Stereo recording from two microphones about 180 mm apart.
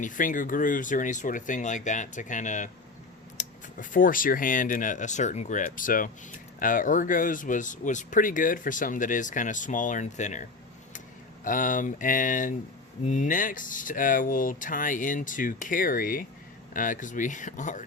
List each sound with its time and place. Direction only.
0.0 s speech: 45° left (ahead or behind)
11.4 s speech: 45° left (ahead or behind)